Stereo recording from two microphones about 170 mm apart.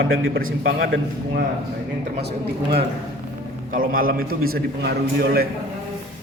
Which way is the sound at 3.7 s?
55° right (ahead or behind).